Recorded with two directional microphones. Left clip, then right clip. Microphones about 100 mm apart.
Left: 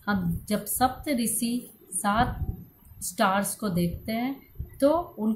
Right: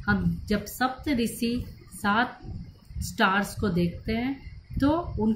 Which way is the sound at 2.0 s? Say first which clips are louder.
Even; 55° left (ahead or behind).